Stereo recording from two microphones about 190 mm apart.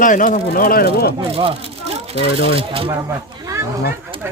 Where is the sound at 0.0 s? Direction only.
45° left (ahead or behind).